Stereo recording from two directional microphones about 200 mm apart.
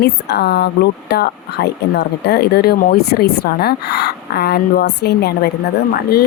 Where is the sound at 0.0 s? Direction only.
55° left (ahead or behind).